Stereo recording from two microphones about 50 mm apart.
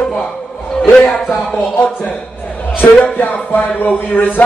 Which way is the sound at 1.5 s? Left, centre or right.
Left.